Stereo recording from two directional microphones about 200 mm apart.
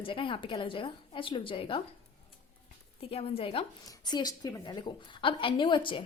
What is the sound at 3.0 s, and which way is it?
A woman's voice, 30° left (ahead or behind).